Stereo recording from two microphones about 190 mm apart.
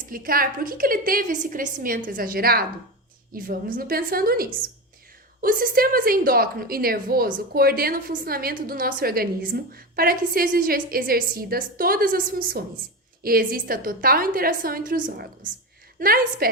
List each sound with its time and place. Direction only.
0.0 s a woman's voice: 50° right (ahead or behind)